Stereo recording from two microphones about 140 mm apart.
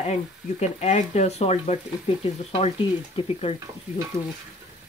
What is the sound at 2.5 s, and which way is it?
Speech, 35° left (ahead or behind).